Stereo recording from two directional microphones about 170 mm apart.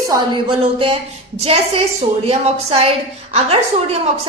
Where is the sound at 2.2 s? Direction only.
35° right (ahead or behind).